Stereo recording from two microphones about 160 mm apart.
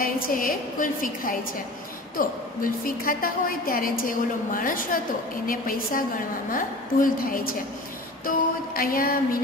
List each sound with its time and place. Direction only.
0.0 s a woman's voice: 60° left (ahead or behind)
8.7 s a woman's voice: 65° left (ahead or behind)